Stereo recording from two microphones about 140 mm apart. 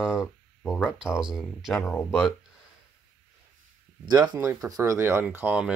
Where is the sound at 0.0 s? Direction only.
5° right (ahead or behind).